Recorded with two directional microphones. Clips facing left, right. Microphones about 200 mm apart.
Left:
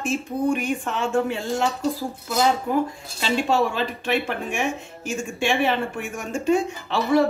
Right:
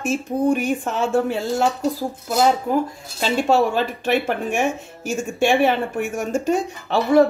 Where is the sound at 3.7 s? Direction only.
45° right (ahead or behind).